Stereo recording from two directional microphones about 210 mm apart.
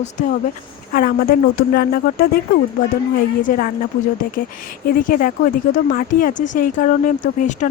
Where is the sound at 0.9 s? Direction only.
45° left (ahead or behind).